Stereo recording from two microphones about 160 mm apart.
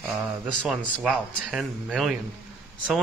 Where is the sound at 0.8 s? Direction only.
Centre (ahead or behind).